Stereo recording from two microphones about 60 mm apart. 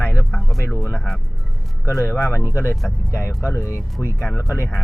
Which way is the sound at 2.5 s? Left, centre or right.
Left.